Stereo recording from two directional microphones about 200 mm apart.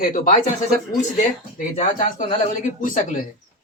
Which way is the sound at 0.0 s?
45° left (ahead or behind).